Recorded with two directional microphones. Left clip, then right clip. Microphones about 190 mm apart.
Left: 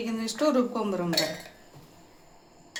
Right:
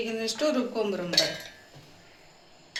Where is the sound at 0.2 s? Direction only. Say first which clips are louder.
Left 3 dB; 50° left (ahead or behind).